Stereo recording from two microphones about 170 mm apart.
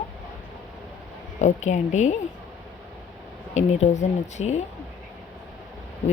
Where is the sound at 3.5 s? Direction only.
45° left (ahead or behind).